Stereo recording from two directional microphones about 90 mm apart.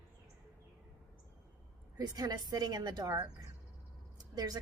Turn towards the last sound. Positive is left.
turn(degrees=-45)  # may be behind; listen again after turning